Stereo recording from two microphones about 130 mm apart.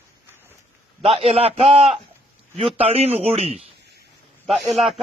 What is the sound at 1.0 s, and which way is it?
Speech, 50° right (ahead or behind).